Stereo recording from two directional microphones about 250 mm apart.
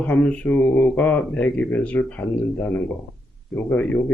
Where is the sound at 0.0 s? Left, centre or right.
Centre.